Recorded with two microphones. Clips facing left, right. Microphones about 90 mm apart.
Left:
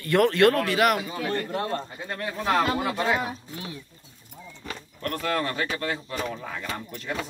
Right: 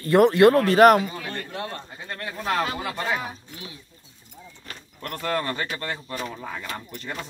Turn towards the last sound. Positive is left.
turn(degrees=-5)  # may be behind; listen again after turning